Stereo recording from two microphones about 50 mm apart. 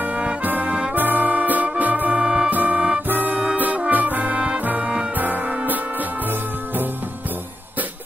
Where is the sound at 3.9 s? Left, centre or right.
Right.